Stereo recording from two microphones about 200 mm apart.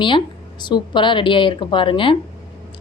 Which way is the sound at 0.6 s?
20° left (ahead or behind).